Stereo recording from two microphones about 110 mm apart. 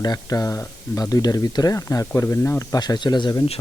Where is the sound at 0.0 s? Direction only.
35° left (ahead or behind).